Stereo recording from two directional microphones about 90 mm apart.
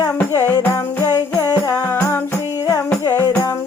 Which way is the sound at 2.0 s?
30° left (ahead or behind).